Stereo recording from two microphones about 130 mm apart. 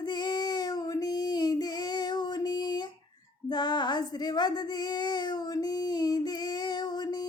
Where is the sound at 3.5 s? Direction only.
35° left (ahead or behind).